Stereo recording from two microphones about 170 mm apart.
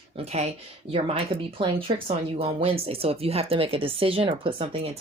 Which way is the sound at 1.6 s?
30° right (ahead or behind).